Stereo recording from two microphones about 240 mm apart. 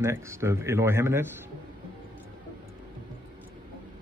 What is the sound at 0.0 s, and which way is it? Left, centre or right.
Speech, centre.